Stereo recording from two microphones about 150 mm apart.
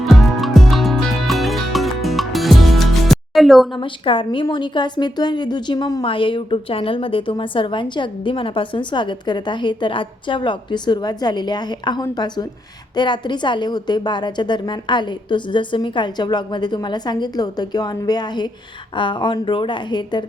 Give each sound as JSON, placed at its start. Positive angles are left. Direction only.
{"t": 0.0, "sound": "music", "side_deg": 0}
{"t": 3.8, "sound": "a woman's voice", "side_deg": 35}